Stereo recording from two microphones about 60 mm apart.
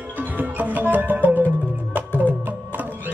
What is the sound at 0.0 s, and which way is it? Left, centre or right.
Music, right.